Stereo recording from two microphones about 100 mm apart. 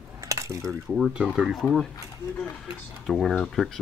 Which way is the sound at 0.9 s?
10° right (ahead or behind).